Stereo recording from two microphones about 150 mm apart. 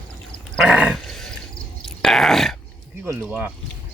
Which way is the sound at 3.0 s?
10° right (ahead or behind).